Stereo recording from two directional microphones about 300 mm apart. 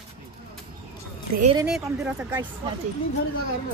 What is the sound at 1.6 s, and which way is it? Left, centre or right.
Speech, centre.